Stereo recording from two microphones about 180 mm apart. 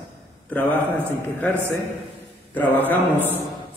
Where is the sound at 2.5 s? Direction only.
10° left (ahead or behind).